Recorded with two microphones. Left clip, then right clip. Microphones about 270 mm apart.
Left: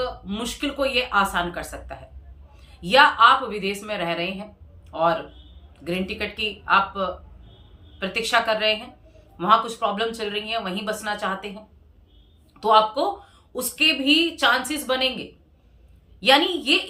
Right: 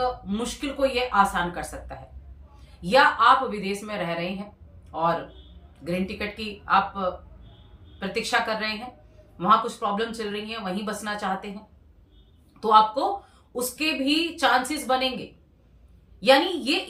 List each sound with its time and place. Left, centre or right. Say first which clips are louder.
0.0 s speech: right 1 dB; centre
2.8 s a man's voice: left 3 dB; centre
12.5 s speech: left 1 dB; centre
16.2 s speech: left 1 dB; centre